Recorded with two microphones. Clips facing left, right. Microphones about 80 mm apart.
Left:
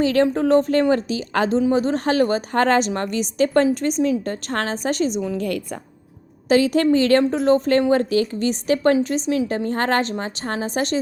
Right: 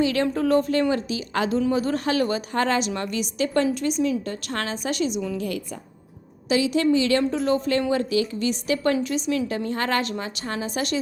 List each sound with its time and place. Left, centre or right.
0.0 s a woman's voice: left
1.5 s a woman's voice: left
6.5 s a woman's voice: left